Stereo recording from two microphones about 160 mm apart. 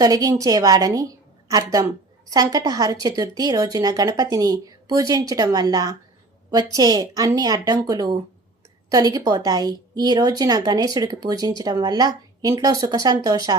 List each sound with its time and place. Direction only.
0.0 s a woman's voice: 25° right (ahead or behind)